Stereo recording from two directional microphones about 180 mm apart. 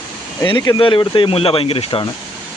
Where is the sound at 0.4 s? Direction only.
20° left (ahead or behind).